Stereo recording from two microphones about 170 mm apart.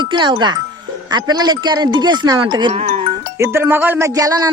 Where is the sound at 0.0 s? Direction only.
25° right (ahead or behind).